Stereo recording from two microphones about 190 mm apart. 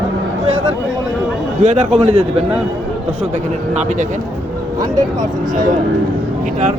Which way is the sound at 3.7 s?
40° right (ahead or behind).